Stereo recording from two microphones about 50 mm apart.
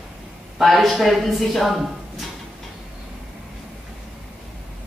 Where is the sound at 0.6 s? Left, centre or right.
Centre.